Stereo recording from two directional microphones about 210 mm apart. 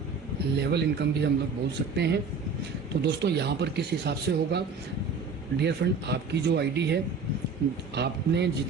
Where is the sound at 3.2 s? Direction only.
55° right (ahead or behind).